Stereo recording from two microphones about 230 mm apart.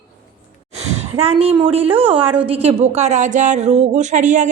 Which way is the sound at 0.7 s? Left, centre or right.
Right.